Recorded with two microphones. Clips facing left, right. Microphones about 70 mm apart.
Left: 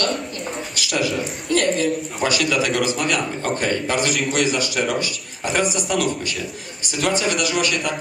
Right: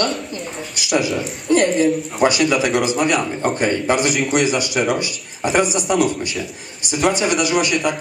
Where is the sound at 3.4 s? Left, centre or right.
Centre.